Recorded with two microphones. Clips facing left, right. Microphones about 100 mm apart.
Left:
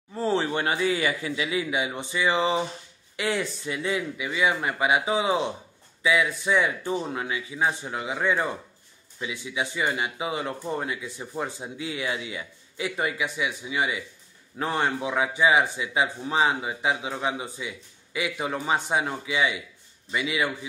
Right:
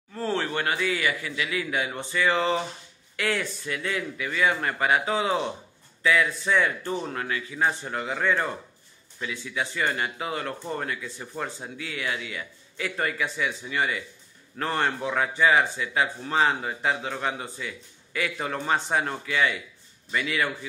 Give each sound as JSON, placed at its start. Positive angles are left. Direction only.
{"t": 0.1, "sound": "speech", "side_deg": 20}